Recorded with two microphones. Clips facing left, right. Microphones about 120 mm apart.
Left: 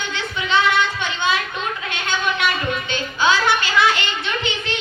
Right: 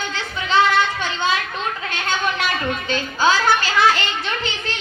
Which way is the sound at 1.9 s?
40° right (ahead or behind).